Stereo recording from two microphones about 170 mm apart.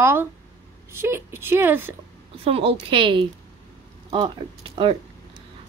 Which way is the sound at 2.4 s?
35° right (ahead or behind).